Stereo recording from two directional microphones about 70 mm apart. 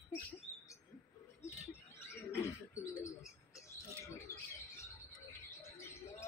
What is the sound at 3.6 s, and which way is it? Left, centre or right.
Rodents, left.